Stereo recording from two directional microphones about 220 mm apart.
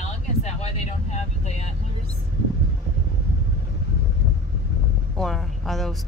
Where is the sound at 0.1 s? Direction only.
30° left (ahead or behind).